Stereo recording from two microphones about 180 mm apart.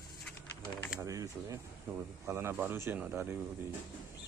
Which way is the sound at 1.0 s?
20° right (ahead or behind).